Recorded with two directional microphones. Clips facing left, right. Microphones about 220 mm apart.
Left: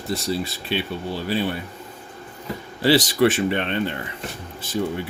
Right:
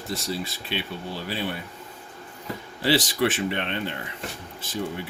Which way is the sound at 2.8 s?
40° left (ahead or behind).